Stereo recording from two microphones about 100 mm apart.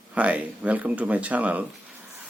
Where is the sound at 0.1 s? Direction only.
15° right (ahead or behind).